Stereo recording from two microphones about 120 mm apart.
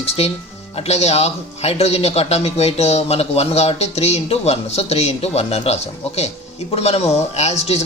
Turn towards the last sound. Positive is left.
turn(degrees=65)  # may be behind; listen again after turning